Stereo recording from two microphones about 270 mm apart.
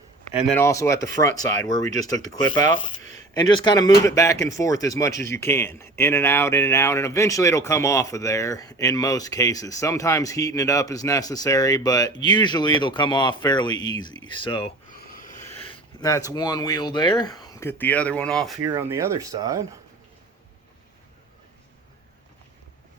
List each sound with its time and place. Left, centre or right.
0.4 s speech: centre
14.9 s a sound: left
16.0 s speech: centre
18.6 s speech: centre